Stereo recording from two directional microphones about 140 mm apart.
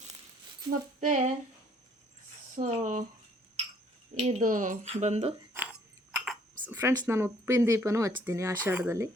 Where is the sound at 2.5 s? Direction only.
65° right (ahead or behind).